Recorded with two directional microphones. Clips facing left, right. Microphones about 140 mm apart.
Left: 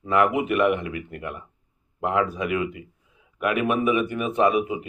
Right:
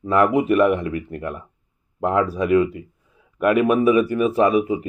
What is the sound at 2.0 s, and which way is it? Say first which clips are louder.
Speech: right 5 dB; 40° right (ahead or behind).